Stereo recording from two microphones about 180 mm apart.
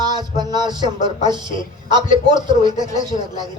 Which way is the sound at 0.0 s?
20° right (ahead or behind).